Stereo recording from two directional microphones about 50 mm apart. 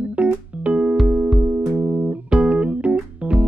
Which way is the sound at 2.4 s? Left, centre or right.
Right.